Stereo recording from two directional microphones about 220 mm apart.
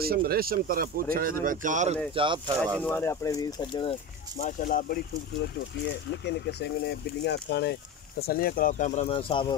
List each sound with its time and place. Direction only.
0.0 s speech: 45° right (ahead or behind)
2.1 s speech: 20° right (ahead or behind)
2.8 s speech: 10° left (ahead or behind)
4.4 s speech: 35° left (ahead or behind)